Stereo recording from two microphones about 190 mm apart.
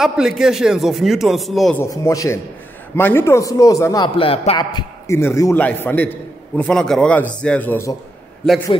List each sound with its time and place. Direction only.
0.0 s a man's voice: centre (ahead or behind)
1.8 s a man's voice: 15° left (ahead or behind)